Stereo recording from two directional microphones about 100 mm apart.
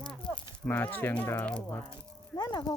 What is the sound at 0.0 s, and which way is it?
Speech, 10° left (ahead or behind).